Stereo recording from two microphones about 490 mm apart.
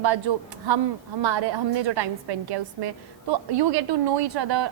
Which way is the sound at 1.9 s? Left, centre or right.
Right.